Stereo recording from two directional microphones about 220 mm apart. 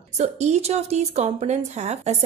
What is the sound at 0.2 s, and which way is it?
A woman's voice, 30° right (ahead or behind).